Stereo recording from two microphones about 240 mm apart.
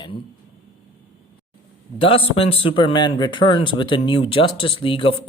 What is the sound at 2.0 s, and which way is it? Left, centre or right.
A man's voice, left.